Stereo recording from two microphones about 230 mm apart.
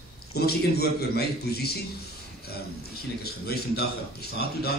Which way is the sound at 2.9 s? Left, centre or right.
Left.